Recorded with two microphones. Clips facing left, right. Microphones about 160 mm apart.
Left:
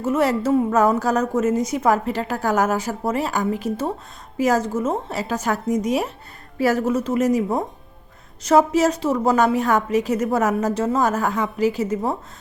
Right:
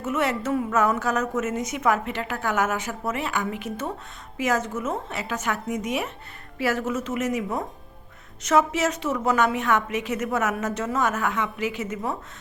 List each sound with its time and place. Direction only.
0.0 s a woman's voice: 35° left (ahead or behind)